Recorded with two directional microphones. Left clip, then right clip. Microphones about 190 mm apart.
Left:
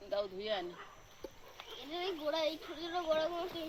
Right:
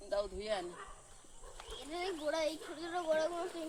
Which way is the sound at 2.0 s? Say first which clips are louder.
Left 1 dB; 15° right (ahead or behind).